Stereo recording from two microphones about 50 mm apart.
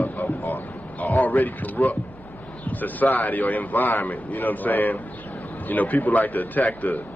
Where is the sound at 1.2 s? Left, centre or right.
Left.